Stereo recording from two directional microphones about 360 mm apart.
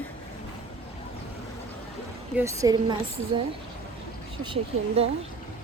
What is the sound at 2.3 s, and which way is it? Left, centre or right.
Speech, centre.